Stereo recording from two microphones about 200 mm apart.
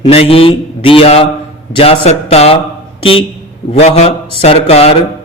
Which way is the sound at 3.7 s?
30° left (ahead or behind).